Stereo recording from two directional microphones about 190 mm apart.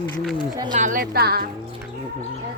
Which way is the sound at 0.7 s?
45° right (ahead or behind).